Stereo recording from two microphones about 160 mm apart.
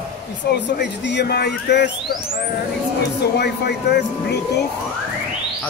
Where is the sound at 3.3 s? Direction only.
90° left.